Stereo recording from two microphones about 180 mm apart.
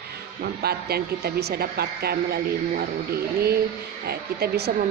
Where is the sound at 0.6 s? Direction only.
60° right (ahead or behind).